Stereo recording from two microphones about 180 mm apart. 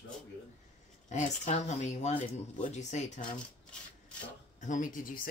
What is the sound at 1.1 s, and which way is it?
Speech, 40° left (ahead or behind).